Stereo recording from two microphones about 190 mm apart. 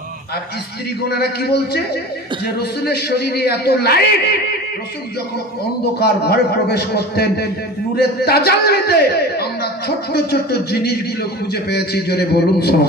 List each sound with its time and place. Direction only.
1.0 s a man's voice: 55° left (ahead or behind)
5.9 s a man's voice: 55° left (ahead or behind)